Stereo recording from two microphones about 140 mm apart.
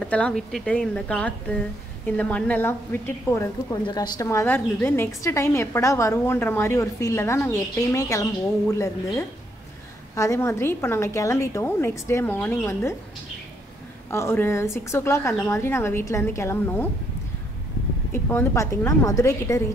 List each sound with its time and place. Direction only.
0.0 s a woman's voice: 5° left (ahead or behind)
3.8 s a woman's voice: 30° left (ahead or behind)
14.1 s a woman's voice: 15° left (ahead or behind)
18.1 s a woman's voice: 15° left (ahead or behind)